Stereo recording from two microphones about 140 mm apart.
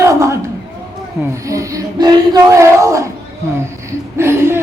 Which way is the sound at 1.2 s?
20° right (ahead or behind).